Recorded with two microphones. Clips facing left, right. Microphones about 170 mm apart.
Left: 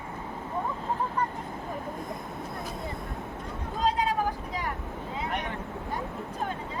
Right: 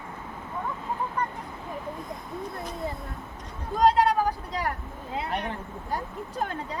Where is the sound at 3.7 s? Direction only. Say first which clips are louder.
Right 6 dB; 75° right (ahead or behind).